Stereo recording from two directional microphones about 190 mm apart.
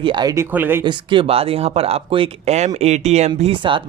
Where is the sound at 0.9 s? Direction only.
25° right (ahead or behind).